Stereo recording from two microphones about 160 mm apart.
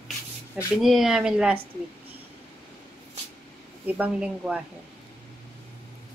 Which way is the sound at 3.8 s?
10° right (ahead or behind).